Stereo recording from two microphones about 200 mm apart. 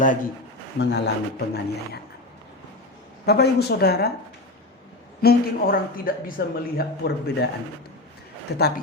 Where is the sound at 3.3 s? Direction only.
50° left (ahead or behind).